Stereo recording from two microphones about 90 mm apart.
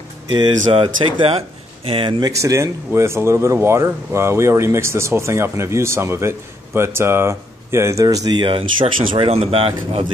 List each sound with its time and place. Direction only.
0.3 s speech: 60° right (ahead or behind); by 1.4 s 80° right
1.9 s speech: 70° right (ahead or behind)
2.4 s speech: 35° right (ahead or behind)
8.4 s speech: 70° right (ahead or behind); by 10.0 s 90° right